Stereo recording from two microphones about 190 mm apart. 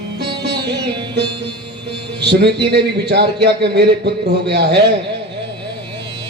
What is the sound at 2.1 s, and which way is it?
Speech, 60° right (ahead or behind).